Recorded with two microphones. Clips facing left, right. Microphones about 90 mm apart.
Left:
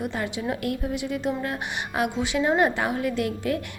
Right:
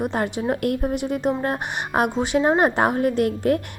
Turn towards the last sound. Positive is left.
turn(degrees=-50)  # may be behind; listen again after turning